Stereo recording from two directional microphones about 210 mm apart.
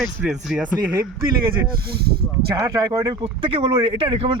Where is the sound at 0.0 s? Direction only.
5° right (ahead or behind).